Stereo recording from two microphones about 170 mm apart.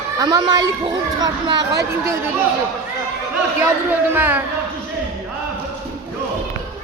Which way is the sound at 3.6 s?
10° right (ahead or behind).